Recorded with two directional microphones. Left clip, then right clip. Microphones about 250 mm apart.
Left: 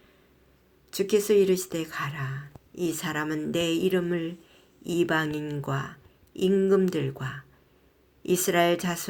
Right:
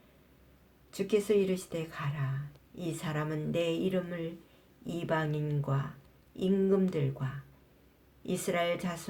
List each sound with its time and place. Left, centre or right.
0.9 s speech: left